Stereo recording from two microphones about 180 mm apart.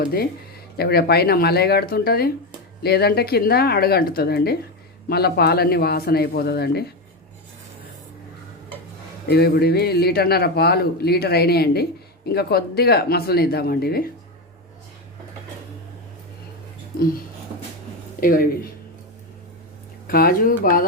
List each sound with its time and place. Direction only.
0.0 s a man's voice: 55° left (ahead or behind)
9.2 s a man's voice: 60° left (ahead or behind)
18.2 s a man's voice: 55° left (ahead or behind)
20.1 s speech: 55° left (ahead or behind)